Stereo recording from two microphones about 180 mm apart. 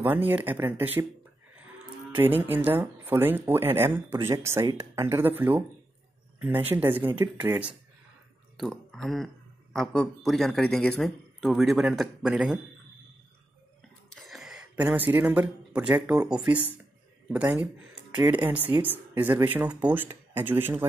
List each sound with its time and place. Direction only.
0.0 s speech: 10° right (ahead or behind)
2.1 s speech: 10° right (ahead or behind)
14.1 s speech: centre (ahead or behind)
18.1 s speech: 20° right (ahead or behind)
18.4 s speech: 10° right (ahead or behind)